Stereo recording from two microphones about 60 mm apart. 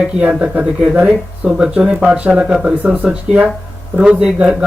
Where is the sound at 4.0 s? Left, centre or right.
Centre.